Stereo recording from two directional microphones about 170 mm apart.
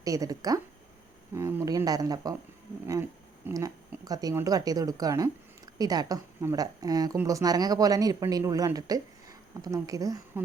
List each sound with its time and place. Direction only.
0.0 s speech: 20° right (ahead or behind)